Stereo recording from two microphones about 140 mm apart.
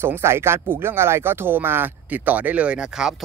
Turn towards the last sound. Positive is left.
turn(degrees=-5)  # may be behind; listen again after turning